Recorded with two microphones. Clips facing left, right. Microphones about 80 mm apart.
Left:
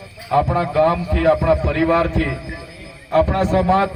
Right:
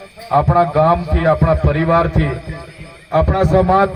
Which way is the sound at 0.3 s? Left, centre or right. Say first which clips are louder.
Right 4 dB; right.